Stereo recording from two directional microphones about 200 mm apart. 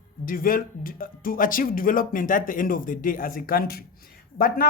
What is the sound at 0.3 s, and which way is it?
Speech, 45° left (ahead or behind).